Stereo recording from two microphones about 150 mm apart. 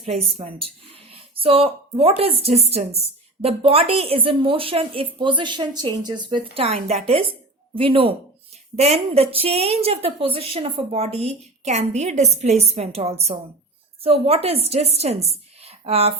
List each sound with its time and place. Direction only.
0.0 s a woman's voice: 45° right (ahead or behind)